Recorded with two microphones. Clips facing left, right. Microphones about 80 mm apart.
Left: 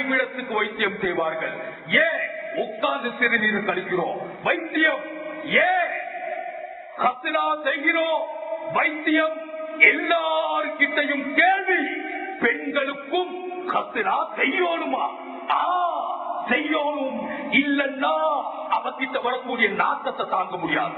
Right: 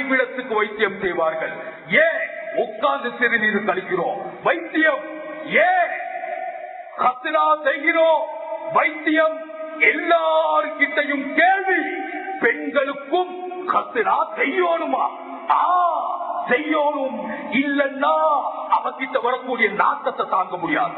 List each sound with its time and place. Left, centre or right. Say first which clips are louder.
0.1 s a man's voice: right 5 dB; right
7.1 s a man's voice: right 8 dB; right
12.4 s a man's voice: right 4 dB; right
18.2 s speech: right 4 dB; centre
18.4 s a man's voice: right 4 dB; right